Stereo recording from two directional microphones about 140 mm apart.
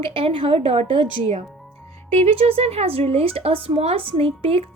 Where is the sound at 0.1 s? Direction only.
40° right (ahead or behind).